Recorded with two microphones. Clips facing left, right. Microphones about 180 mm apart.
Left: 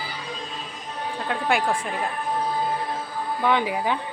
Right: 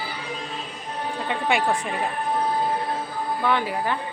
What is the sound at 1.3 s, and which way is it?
Speech, centre (ahead or behind).